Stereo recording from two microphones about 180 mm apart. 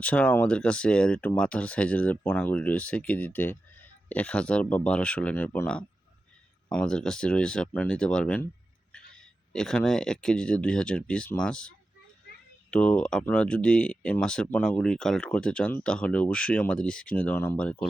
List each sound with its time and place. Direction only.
0.0 s speech: 5° left (ahead or behind)
9.5 s speech: 5° left (ahead or behind)
12.7 s speech: 5° left (ahead or behind)